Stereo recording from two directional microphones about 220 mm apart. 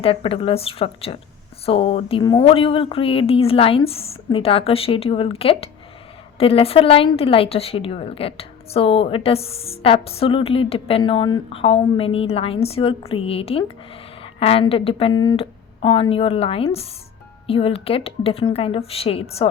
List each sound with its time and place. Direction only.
0.0 s a woman's voice: 25° left (ahead or behind)